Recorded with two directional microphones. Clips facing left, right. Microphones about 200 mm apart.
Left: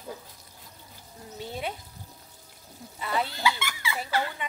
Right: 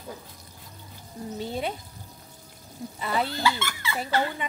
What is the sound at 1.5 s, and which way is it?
Speech, 35° right (ahead or behind).